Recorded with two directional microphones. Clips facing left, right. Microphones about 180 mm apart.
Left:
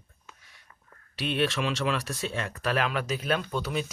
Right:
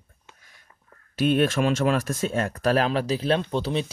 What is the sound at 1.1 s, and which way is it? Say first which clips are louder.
Speech: right 7 dB; 45° right (ahead or behind).